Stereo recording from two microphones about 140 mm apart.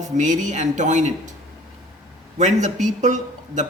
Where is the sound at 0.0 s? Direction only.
60° right (ahead or behind).